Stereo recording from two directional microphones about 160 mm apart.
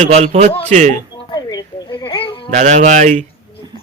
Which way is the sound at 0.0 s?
40° right (ahead or behind).